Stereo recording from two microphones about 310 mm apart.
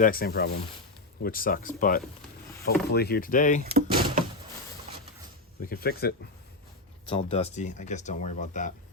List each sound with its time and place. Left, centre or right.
0.0 s speech: left
3.6 s door: right
5.6 s speech: left
7.0 s speech: centre